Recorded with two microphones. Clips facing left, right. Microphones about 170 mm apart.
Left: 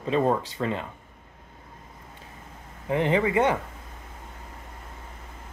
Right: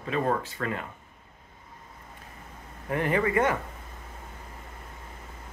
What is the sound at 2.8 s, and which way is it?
Speech, 20° left (ahead or behind).